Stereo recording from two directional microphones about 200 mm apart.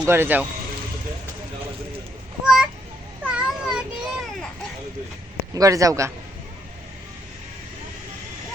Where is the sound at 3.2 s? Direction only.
5° right (ahead or behind).